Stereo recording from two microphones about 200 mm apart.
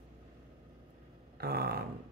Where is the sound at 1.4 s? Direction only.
50° right (ahead or behind).